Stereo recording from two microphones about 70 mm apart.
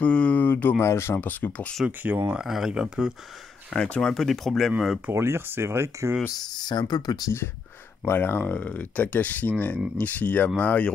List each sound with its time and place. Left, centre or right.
0.0 s speech: centre
0.8 s speech: left
1.3 s speech: left
1.9 s speech: right
2.3 s speech: centre
3.7 s speech: centre
5.1 s speech: right
6.3 s speech: left
8.0 s speech: left